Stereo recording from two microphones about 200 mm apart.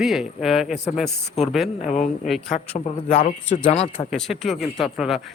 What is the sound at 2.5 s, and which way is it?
Speech, 35° left (ahead or behind).